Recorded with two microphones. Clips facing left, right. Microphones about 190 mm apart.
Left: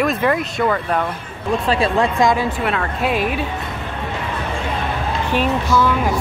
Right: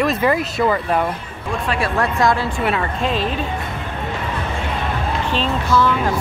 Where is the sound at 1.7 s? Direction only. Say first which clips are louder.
Left 3 dB; 20° left (ahead or behind).